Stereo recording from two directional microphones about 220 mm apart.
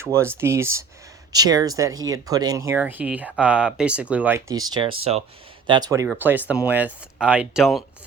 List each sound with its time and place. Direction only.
0.0 s speech: 10° right (ahead or behind)